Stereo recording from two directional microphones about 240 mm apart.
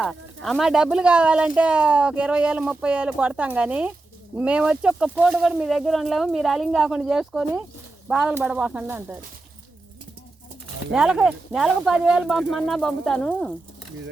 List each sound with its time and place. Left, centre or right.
0.0 s speech: centre
10.9 s speech: centre